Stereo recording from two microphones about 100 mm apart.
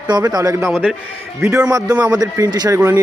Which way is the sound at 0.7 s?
10° right (ahead or behind).